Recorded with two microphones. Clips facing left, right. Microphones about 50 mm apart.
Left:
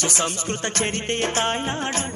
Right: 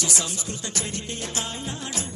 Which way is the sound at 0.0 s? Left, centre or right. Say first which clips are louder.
Left 5 dB; left.